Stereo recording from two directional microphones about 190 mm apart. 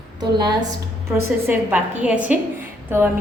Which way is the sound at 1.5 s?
10° right (ahead or behind).